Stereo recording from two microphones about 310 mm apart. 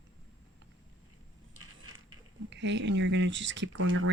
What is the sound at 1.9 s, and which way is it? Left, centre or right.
Speech, right.